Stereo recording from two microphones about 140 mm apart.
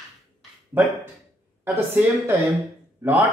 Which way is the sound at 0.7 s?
15° right (ahead or behind).